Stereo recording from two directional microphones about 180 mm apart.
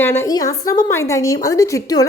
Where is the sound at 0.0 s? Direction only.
15° left (ahead or behind).